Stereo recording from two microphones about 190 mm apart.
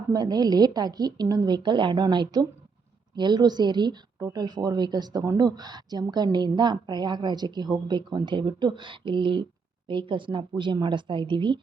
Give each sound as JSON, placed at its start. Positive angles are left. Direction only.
{"t": 0.1, "sound": "a woman's voice", "side_deg": -20}